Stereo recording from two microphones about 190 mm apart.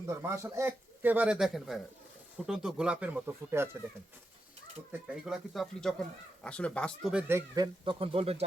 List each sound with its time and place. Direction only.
0.1 s speech: 15° right (ahead or behind)
4.9 s speech: 5° right (ahead or behind)
7.1 s speech: 10° right (ahead or behind); by 8.4 s 30° right (ahead or behind)